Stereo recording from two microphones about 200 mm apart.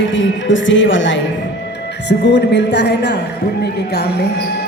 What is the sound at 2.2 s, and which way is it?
A woman's voice, 60° left (ahead or behind).